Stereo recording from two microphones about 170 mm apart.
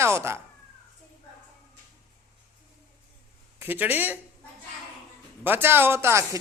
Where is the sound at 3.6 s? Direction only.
10° right (ahead or behind).